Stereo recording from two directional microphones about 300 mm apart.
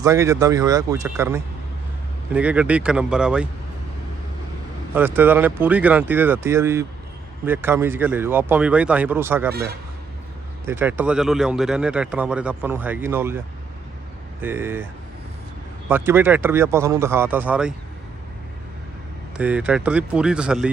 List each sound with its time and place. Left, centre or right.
0.0 s speech: centre
4.9 s speech: centre
9.5 s a man's voice: right
10.7 s speech: centre
14.4 s speech: centre
15.9 s speech: centre
19.4 s speech: centre